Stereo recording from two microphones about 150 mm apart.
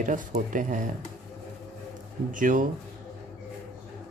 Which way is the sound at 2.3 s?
60° right (ahead or behind).